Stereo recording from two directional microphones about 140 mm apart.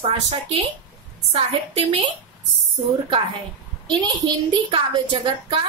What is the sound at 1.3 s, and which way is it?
Speech, 50° right (ahead or behind).